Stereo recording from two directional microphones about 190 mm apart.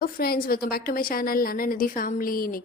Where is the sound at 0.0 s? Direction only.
50° left (ahead or behind).